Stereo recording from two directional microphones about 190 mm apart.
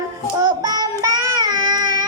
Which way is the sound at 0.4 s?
20° right (ahead or behind).